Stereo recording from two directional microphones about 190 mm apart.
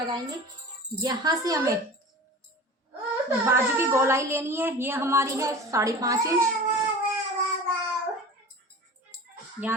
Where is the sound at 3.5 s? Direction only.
15° right (ahead or behind).